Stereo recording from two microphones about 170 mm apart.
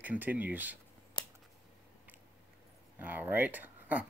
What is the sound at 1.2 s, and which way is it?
Scissors, 25° left (ahead or behind).